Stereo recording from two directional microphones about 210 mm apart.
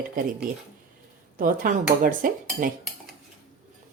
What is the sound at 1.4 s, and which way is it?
Cutlery, 40° right (ahead or behind).